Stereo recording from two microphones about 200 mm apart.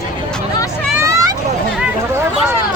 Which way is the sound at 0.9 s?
15° right (ahead or behind).